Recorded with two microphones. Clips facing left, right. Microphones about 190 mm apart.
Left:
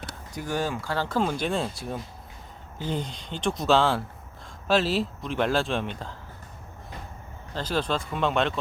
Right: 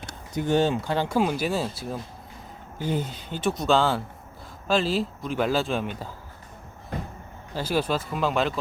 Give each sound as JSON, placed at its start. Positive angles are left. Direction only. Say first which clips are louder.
{"t": 0.3, "sound": "speech", "louder": "right 7 dB", "side_deg": -25}
{"t": 6.9, "sound": "a sound", "louder": "right 9 dB", "side_deg": -55}
{"t": 7.5, "sound": "speech", "louder": "right 2 dB", "side_deg": -10}